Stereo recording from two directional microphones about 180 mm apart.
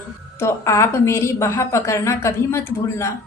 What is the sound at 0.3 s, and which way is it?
A woman's voice, 15° left (ahead or behind).